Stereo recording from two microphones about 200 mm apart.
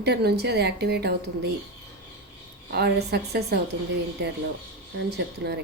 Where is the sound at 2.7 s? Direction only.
55° right (ahead or behind).